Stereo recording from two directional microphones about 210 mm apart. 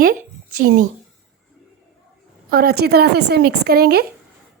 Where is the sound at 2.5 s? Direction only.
50° right (ahead or behind).